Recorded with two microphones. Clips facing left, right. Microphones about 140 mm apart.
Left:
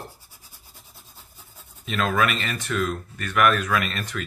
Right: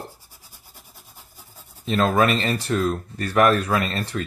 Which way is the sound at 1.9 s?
35° right (ahead or behind).